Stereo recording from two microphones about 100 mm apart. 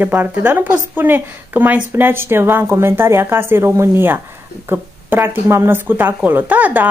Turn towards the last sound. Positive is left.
turn(degrees=-15)  # may be behind; listen again after turning